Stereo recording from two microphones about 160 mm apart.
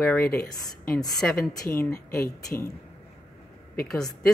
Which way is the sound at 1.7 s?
15° left (ahead or behind).